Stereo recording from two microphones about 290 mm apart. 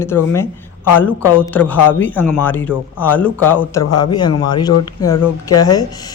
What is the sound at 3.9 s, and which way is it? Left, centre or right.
Speech, left.